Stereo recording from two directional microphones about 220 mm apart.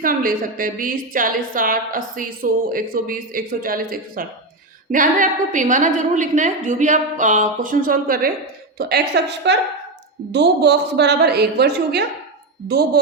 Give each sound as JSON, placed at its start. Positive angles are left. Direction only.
{"t": 0.0, "sound": "a woman's voice", "side_deg": -40}